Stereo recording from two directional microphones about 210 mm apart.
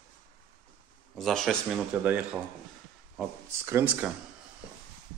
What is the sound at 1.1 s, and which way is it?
Speech, centre (ahead or behind).